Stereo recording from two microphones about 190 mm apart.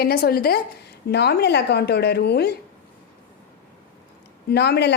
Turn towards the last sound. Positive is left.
turn(degrees=60)  # may be behind; listen again after turning